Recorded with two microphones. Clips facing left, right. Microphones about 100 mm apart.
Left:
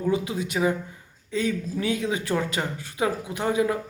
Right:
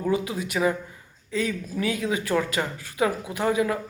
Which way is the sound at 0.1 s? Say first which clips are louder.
Even; 25° left (ahead or behind).